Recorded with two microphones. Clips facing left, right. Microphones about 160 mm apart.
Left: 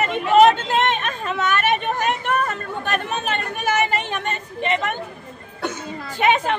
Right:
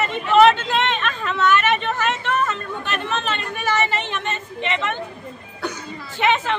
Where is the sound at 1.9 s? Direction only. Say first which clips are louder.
Left 1 dB; 50° left (ahead or behind).